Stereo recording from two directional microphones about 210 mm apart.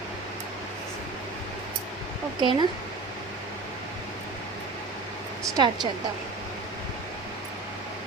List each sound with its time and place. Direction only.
2.4 s a woman's voice: 20° right (ahead or behind)
5.5 s a woman's voice: 20° right (ahead or behind)